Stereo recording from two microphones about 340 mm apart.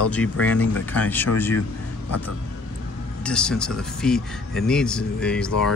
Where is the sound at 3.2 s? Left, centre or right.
Centre.